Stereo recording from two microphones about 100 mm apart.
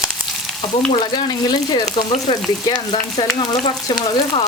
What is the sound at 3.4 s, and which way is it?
Speech, 45° left (ahead or behind).